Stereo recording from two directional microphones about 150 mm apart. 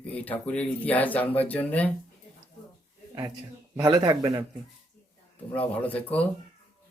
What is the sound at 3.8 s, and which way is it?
Speech, 25° right (ahead or behind).